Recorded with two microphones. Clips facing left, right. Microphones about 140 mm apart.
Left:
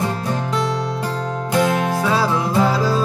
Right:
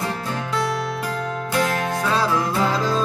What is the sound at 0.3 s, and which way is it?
Music, 25° left (ahead or behind).